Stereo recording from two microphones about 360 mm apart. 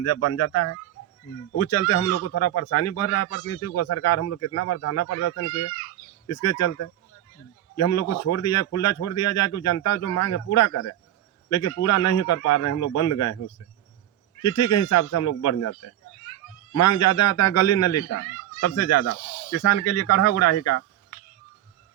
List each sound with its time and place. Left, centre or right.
0.0 s a man's voice: left
14.4 s a man's voice: left